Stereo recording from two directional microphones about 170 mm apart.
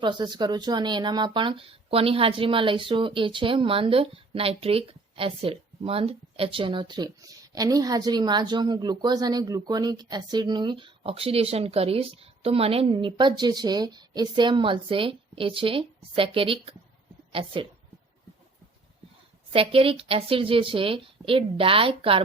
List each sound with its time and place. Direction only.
0.0 s speech: 25° right (ahead or behind)
19.5 s a woman's voice: 35° right (ahead or behind)